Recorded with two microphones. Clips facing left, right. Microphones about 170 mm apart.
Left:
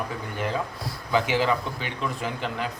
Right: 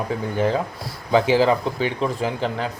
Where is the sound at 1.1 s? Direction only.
30° right (ahead or behind).